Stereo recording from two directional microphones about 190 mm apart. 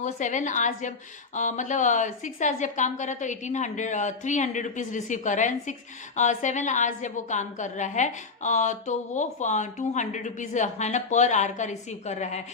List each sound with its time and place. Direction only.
0.0 s a woman's voice: 40° left (ahead or behind)